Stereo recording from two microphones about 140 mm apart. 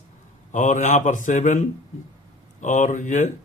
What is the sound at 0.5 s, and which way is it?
Speech, 60° left (ahead or behind).